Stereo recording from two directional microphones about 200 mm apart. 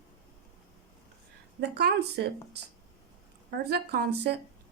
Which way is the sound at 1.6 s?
55° right (ahead or behind).